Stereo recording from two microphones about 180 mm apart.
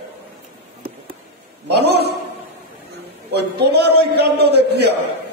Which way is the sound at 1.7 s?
65° right (ahead or behind).